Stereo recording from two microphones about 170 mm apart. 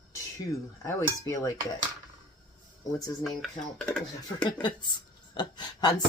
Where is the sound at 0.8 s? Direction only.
20° left (ahead or behind).